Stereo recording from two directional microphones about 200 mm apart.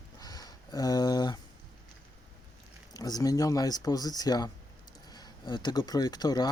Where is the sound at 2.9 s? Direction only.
20° left (ahead or behind).